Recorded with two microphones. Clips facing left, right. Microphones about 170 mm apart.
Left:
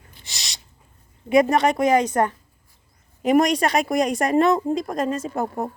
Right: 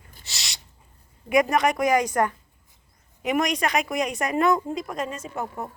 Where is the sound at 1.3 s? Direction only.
30° left (ahead or behind).